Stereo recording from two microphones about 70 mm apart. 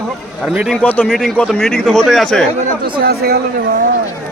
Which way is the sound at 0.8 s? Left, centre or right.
Left.